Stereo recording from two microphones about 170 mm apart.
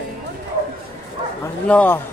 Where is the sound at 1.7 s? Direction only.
10° left (ahead or behind).